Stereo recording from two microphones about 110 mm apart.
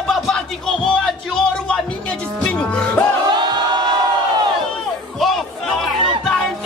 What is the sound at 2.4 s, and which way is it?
Speech, 10° left (ahead or behind).